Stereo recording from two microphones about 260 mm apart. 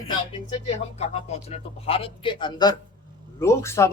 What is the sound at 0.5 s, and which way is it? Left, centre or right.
Speech, left.